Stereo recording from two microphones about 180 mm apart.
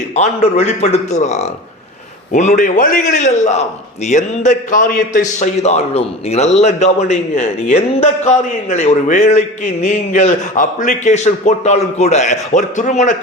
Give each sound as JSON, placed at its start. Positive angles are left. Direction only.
{"t": 0.1, "sound": "a man's voice", "side_deg": 40}
{"t": 5.4, "sound": "a man's voice", "side_deg": 35}